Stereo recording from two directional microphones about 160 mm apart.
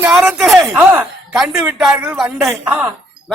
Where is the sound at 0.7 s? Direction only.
10° right (ahead or behind).